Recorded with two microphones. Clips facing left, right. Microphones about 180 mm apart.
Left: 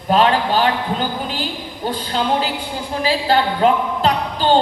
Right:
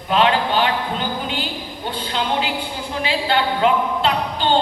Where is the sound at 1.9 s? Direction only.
40° left (ahead or behind).